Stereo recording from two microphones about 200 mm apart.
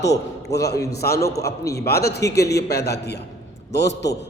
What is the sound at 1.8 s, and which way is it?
A man's voice, 50° left (ahead or behind).